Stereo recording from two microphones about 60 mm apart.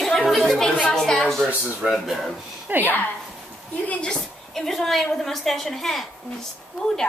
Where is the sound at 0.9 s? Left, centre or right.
Centre.